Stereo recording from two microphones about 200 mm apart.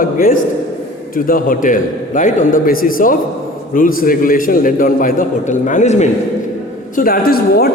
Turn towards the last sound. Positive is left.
turn(degrees=50)  # may be behind; listen again after turning